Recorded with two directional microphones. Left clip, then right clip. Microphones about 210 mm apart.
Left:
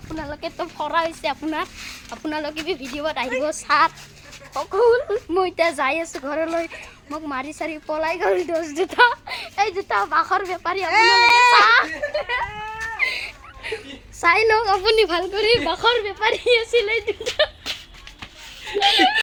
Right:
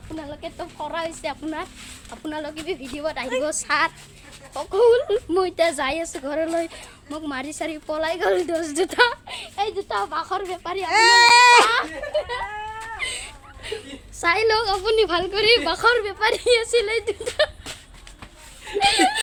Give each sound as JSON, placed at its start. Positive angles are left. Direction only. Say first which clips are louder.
{"t": 0.2, "sound": "a woman's voice", "louder": "left 5 dB", "side_deg": 25}
{"t": 3.4, "sound": "a woman's voice", "louder": "left 5 dB", "side_deg": 0}
{"t": 9.2, "sound": "a woman's voice", "louder": "left 4 dB", "side_deg": 25}
{"t": 10.8, "sound": "speech", "louder": "right 1 dB", "side_deg": -20}
{"t": 13.0, "sound": "a sound", "louder": "left 8 dB", "side_deg": 10}
{"t": 13.7, "sound": "a woman's voice", "louder": "left 2 dB", "side_deg": 0}
{"t": 18.9, "sound": "speech", "louder": "left 3 dB", "side_deg": 0}